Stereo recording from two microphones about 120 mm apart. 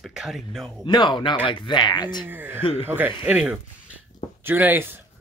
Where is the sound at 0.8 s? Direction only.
40° left (ahead or behind).